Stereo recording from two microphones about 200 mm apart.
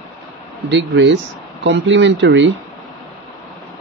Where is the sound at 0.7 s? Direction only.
65° right (ahead or behind).